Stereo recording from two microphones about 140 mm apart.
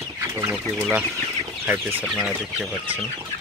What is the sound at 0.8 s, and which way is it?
Speech, 10° right (ahead or behind).